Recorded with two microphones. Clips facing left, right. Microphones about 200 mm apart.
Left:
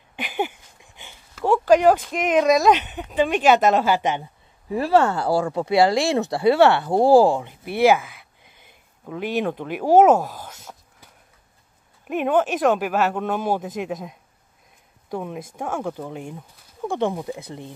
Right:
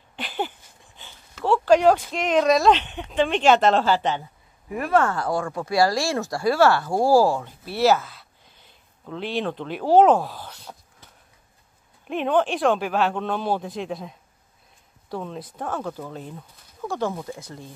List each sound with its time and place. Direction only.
0.1 s a sound: 10° left (ahead or behind)
1.3 s speech: 10° left (ahead or behind)
4.6 s speech: 30° left (ahead or behind); by 8.2 s 15° left (ahead or behind)
8.6 s a sound: 10° left (ahead or behind)
12.1 s speech: 5° left (ahead or behind)
15.0 s speech: 15° left (ahead or behind)